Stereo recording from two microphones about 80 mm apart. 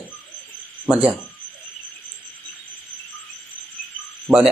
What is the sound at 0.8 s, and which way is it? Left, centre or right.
Speech, centre.